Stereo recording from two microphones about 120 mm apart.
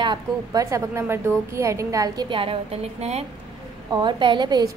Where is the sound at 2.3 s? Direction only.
50° right (ahead or behind).